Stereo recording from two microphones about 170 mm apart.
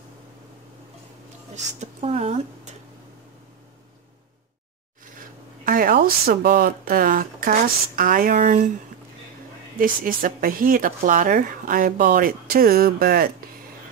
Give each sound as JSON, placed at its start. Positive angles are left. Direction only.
{"t": 1.5, "sound": "speech", "side_deg": -45}
{"t": 5.7, "sound": "speech", "side_deg": -55}
{"t": 9.8, "sound": "speech", "side_deg": -55}